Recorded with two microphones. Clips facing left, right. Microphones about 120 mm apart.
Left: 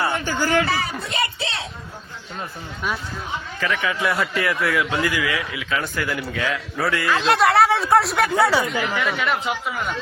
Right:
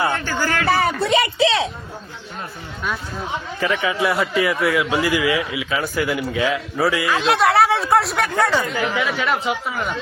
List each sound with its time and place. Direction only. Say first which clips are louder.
0.1 s a man's voice: left 1 dB; 15° left (ahead or behind)
0.7 s speech: right 8 dB; 55° right (ahead or behind); by 1.6 s 90° right
3.6 s speech: right 3 dB; 15° right (ahead or behind)
4.4 s speech: right 3 dB; centre (ahead or behind)
4.9 s speech: right 4 dB; 20° right (ahead or behind)
6.7 s speech: right 1 dB; centre (ahead or behind)
8.3 s speech: left 1 dB; 10° left (ahead or behind)
8.9 s speech: right 2 dB; centre (ahead or behind)